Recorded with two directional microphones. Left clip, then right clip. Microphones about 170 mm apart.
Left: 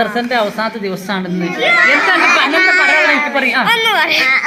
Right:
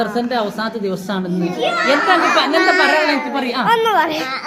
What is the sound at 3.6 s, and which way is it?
Speech, 45° right (ahead or behind).